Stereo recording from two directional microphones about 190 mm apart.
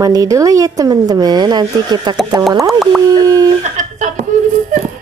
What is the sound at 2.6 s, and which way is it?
Speech, centre (ahead or behind).